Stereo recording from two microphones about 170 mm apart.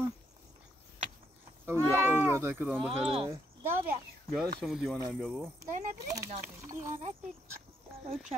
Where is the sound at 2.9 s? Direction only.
35° right (ahead or behind).